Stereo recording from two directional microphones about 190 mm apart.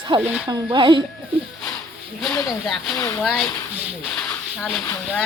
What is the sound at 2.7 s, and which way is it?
Speech, centre (ahead or behind).